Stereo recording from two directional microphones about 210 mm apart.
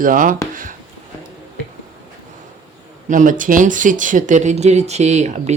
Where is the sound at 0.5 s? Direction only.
40° right (ahead or behind).